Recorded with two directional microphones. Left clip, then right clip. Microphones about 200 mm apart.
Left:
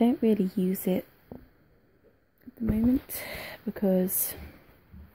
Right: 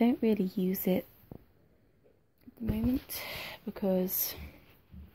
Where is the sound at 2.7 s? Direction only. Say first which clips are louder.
Left 6 dB; 40° left (ahead or behind).